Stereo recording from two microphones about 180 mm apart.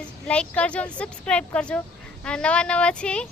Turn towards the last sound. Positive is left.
turn(degrees=5)  # may be behind; listen again after turning